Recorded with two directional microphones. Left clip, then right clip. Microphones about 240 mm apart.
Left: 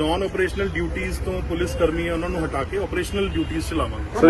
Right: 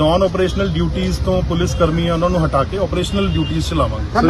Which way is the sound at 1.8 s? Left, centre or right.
Centre.